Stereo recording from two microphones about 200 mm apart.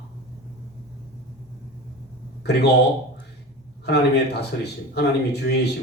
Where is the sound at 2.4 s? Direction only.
55° left (ahead or behind).